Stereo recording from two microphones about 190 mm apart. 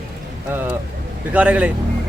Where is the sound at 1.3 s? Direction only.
5° right (ahead or behind).